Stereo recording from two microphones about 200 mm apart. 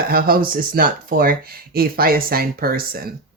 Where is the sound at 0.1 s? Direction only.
45° right (ahead or behind).